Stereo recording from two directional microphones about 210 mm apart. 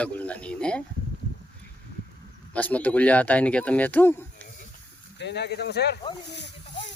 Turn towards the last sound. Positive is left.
turn(degrees=55)  # may be behind; listen again after turning